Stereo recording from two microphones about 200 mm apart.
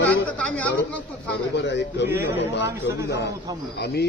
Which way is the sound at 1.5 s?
60° left (ahead or behind).